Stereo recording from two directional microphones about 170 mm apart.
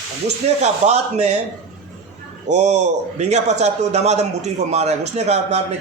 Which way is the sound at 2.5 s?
45° right (ahead or behind).